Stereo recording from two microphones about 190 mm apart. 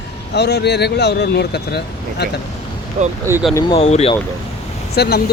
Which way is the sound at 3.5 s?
15° left (ahead or behind).